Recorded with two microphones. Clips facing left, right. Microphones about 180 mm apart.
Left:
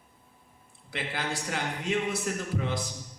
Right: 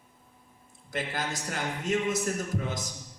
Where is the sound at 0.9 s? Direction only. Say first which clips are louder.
Right 1 dB; 45° right (ahead or behind).